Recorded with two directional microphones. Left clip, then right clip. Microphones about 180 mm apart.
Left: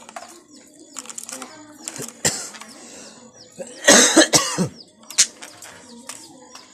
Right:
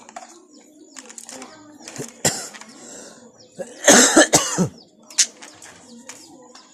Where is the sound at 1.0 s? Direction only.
5° left (ahead or behind).